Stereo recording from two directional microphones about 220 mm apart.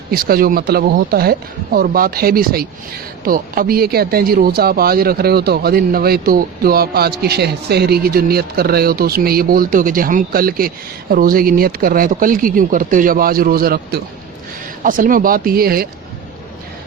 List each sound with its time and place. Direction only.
0.1 s speech: 45° right (ahead or behind)